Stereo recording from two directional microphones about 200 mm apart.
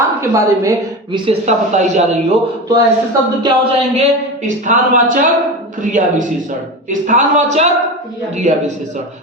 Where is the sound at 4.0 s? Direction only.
40° right (ahead or behind).